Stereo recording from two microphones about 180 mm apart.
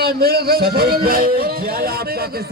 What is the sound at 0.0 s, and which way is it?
A man's voice, 60° right (ahead or behind).